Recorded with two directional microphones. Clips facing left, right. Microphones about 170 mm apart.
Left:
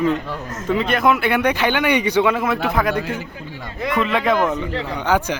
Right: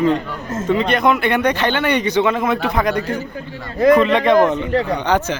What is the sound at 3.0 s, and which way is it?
Speech, 40° right (ahead or behind).